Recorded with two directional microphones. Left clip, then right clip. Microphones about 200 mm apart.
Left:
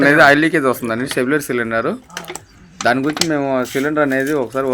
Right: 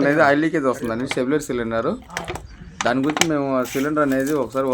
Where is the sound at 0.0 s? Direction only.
15° left (ahead or behind).